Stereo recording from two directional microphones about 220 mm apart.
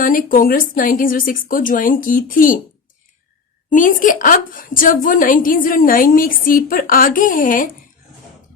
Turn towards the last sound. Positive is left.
turn(degrees=40)  # may be behind; listen again after turning